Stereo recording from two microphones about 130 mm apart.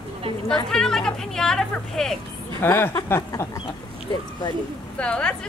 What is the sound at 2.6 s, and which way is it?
Speech, 20° left (ahead or behind).